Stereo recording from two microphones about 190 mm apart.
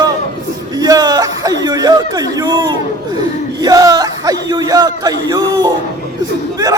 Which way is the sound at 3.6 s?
20° right (ahead or behind).